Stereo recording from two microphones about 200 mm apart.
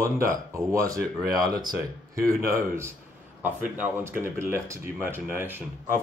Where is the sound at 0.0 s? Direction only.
15° right (ahead or behind).